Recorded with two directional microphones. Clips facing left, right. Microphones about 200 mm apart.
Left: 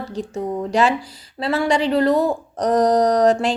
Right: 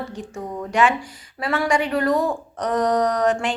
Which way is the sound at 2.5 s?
40° left (ahead or behind).